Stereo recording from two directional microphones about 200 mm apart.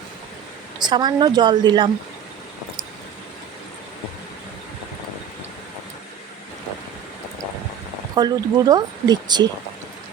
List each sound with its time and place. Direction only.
0.8 s speech: 20° right (ahead or behind)
8.1 s speech: 20° right (ahead or behind)